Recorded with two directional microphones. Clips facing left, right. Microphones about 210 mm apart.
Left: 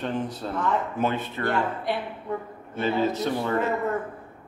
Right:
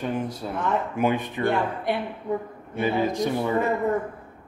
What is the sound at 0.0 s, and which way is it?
Speech, 10° right (ahead or behind).